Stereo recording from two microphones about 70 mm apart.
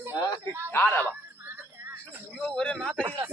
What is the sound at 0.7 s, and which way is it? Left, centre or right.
Speech, left.